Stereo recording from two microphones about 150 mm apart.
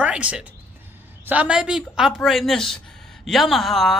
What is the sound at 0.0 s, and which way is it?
A woman's voice, 10° right (ahead or behind).